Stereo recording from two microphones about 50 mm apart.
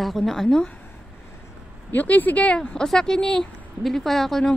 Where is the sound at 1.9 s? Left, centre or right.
Left; by 4.6 s centre.